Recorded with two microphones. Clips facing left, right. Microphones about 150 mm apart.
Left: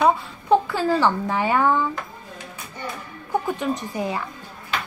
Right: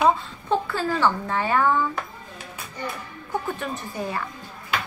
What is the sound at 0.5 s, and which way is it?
A woman's voice, 15° left (ahead or behind).